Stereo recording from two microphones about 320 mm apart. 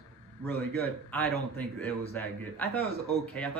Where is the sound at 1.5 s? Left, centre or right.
Centre.